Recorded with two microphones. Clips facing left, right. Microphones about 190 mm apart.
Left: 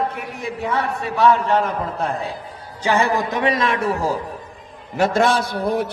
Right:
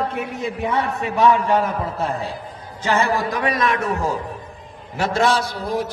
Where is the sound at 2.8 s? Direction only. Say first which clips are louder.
Left 1 dB; 15° left (ahead or behind); by 4.1 s 30° left (ahead or behind).